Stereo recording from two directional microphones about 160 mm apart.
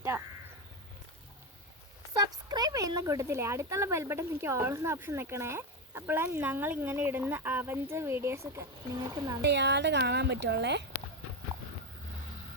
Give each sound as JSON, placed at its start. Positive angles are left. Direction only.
{"t": 0.1, "sound": "speech", "side_deg": -15}
{"t": 2.1, "sound": "speech", "side_deg": -25}
{"t": 9.4, "sound": "a woman's voice", "side_deg": -90}